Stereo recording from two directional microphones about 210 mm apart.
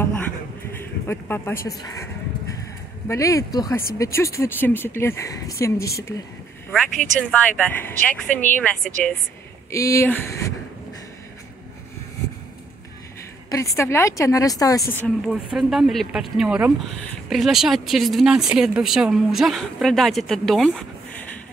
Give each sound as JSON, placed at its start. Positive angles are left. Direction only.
{"t": 0.7, "sound": "a sound", "side_deg": 10}
{"t": 3.1, "sound": "a woman's voice", "side_deg": 15}
{"t": 6.7, "sound": "a woman's voice", "side_deg": 5}
{"t": 13.5, "sound": "a woman's voice", "side_deg": 15}